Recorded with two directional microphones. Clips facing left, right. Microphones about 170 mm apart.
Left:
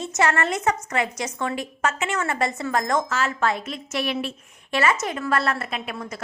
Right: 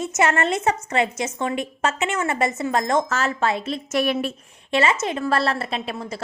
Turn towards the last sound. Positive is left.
turn(degrees=-30)  # may be behind; listen again after turning